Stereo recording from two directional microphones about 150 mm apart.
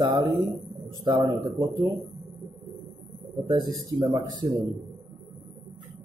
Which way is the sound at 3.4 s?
30° right (ahead or behind).